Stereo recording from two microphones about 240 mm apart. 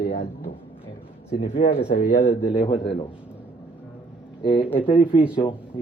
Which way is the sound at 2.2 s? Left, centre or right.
Left.